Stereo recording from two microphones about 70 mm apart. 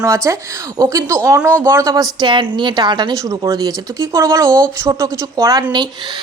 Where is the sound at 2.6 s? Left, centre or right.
Right.